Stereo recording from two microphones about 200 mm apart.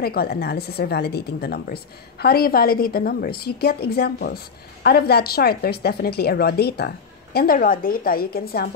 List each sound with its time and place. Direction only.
0.0 s a woman's voice: 50° left (ahead or behind)